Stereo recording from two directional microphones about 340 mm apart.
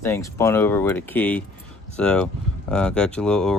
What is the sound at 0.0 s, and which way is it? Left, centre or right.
Speech, centre.